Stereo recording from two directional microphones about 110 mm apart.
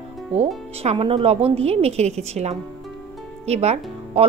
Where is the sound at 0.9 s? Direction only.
55° right (ahead or behind).